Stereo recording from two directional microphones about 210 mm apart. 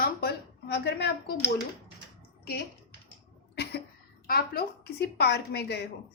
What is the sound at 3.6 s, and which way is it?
Cough, 50° left (ahead or behind).